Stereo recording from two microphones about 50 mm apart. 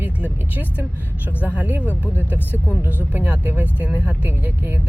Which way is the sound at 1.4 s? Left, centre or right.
Right.